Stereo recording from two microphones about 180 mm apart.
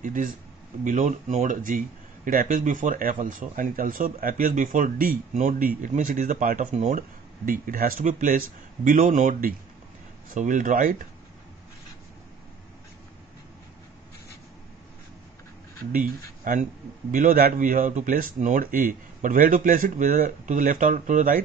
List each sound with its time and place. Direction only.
0.0 s speech: 45° right (ahead or behind)
15.9 s speech: 45° right (ahead or behind)